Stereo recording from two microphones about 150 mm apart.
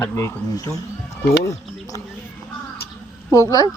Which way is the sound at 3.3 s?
20° left (ahead or behind).